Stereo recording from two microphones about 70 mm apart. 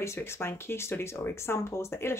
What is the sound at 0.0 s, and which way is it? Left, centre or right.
Speech, left.